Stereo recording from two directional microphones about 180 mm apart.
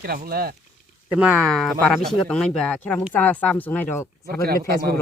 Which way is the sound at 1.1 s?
5° right (ahead or behind).